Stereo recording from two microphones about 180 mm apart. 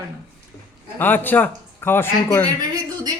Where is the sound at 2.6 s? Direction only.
20° right (ahead or behind).